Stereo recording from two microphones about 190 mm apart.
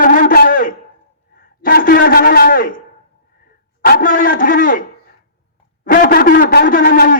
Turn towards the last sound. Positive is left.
turn(degrees=50)  # may be behind; listen again after turning